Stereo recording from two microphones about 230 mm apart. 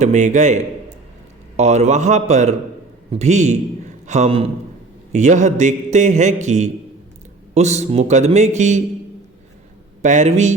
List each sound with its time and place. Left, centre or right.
0.0 s a man's voice: right
10.0 s a man's voice: right